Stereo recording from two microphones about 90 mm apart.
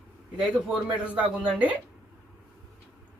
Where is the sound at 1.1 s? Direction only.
15° right (ahead or behind).